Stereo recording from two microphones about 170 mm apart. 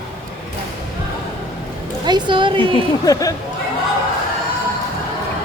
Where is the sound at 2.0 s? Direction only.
25° right (ahead or behind).